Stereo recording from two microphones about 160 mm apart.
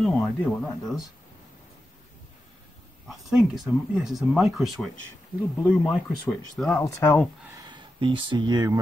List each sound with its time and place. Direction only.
0.0 s speech: 5° left (ahead or behind)
3.1 s speech: centre (ahead or behind)
6.8 s speech: 15° left (ahead or behind)
7.5 s speech: 30° right (ahead or behind)